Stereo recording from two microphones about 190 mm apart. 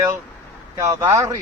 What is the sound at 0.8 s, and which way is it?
Speech, 15° right (ahead or behind).